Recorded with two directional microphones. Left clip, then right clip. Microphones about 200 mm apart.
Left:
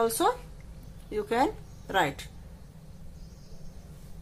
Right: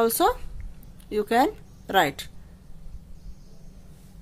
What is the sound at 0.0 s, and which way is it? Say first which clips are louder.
Speech: right 4 dB; 40° right (ahead or behind).